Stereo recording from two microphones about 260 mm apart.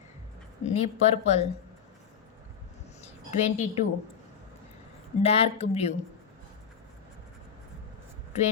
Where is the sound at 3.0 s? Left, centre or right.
Left.